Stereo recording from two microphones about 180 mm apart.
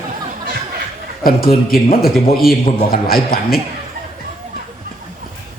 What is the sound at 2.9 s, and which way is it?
Speech, 55° left (ahead or behind).